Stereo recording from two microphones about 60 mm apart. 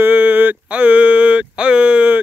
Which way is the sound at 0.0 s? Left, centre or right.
Right.